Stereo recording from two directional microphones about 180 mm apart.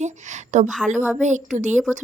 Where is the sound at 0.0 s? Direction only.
40° right (ahead or behind).